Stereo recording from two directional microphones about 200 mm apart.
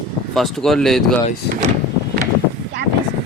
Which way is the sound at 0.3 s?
Centre (ahead or behind).